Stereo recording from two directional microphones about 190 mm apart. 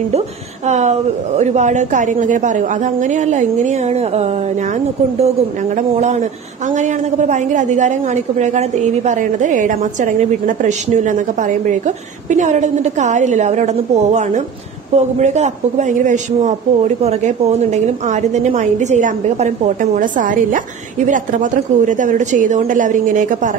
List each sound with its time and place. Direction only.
0.7 s a woman's voice: 35° right (ahead or behind)